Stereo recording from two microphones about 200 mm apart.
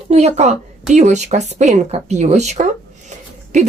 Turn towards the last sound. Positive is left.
turn(degrees=-35)  # may be behind; listen again after turning